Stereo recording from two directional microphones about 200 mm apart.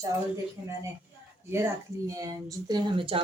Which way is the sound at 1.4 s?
15° right (ahead or behind).